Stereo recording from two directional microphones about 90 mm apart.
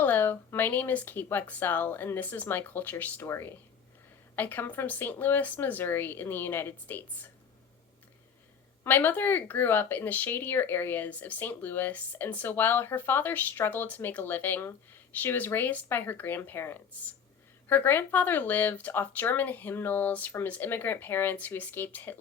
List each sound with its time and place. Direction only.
0.0 s speech: 20° left (ahead or behind)
8.8 s speech: 20° left (ahead or behind)